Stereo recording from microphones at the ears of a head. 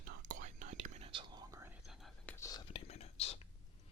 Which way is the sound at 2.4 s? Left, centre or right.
Left.